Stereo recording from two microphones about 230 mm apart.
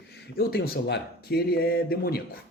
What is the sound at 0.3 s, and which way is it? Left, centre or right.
Speech, left.